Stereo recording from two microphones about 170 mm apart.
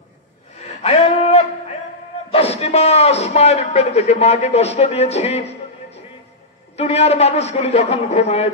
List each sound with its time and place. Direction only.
0.8 s a sound: 40° left (ahead or behind)
2.3 s speech: 35° left (ahead or behind)
6.8 s speech: 40° left (ahead or behind)